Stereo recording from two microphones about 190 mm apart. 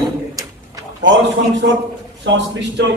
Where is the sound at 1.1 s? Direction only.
70° right (ahead or behind).